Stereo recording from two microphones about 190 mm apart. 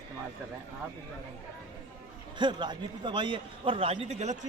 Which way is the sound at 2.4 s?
25° right (ahead or behind).